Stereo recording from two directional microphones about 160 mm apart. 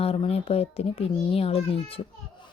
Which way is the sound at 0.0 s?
40° left (ahead or behind).